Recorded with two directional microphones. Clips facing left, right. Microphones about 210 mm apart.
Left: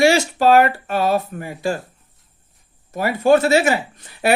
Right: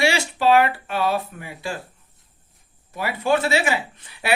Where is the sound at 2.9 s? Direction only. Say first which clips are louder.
Left 7 dB; 45° left (ahead or behind).